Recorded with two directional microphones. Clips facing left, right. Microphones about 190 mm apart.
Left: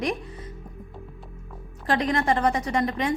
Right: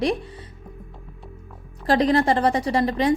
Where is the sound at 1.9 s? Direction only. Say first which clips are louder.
Right 5 dB; 35° right (ahead or behind).